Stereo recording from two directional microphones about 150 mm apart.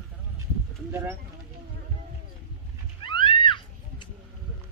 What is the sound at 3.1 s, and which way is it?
Music, 35° left (ahead or behind).